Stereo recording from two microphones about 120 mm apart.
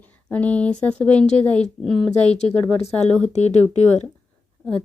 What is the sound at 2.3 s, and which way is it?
Speech, 60° left (ahead or behind).